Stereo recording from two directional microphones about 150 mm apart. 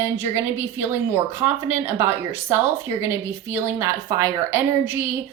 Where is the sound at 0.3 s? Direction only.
15° right (ahead or behind).